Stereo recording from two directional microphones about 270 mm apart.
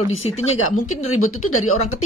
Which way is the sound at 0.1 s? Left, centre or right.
Left.